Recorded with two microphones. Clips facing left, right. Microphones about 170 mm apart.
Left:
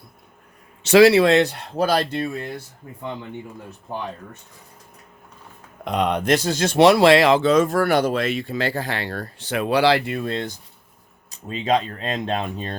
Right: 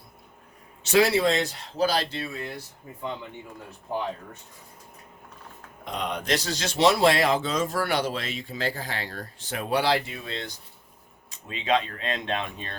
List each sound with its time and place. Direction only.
0.8 s speech: 85° left; by 2.3 s 50° left (ahead or behind)
5.8 s speech: 65° left (ahead or behind); by 10.5 s 50° left (ahead or behind)
11.3 s speech: 40° left (ahead or behind)